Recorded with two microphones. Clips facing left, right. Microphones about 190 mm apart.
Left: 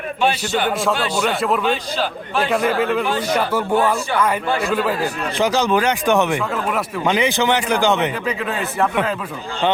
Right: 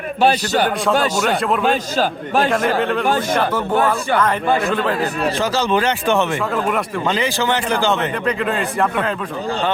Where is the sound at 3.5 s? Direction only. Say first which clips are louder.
Even; 10° left (ahead or behind).